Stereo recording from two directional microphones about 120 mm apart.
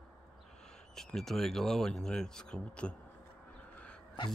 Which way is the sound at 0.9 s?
Centre (ahead or behind).